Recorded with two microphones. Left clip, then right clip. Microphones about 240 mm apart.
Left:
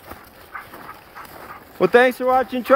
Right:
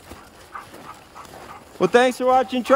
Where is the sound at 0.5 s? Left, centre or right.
Right.